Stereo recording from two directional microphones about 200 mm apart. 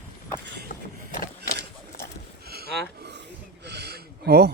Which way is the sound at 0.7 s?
40° left (ahead or behind).